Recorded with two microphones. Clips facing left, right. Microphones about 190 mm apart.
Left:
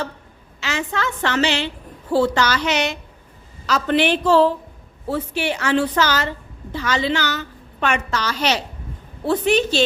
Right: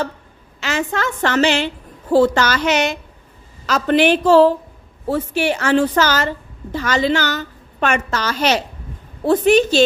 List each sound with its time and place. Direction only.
0.6 s a woman's voice: 45° right (ahead or behind)